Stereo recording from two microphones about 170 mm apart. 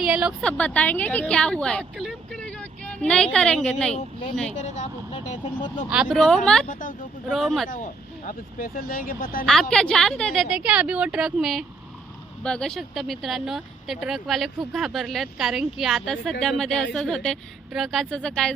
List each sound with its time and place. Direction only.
0.0 s speech: 5° right (ahead or behind)
0.5 s a woman's voice: 10° left (ahead or behind)
3.9 s speech: 35° left (ahead or behind)
5.5 s speech: 30° left (ahead or behind)
5.9 s speech: centre (ahead or behind)
6.7 s speech: 50° left (ahead or behind)
7.3 s speech: centre (ahead or behind)
8.3 s speech: 55° left (ahead or behind)
9.5 s speech: 5° left (ahead or behind)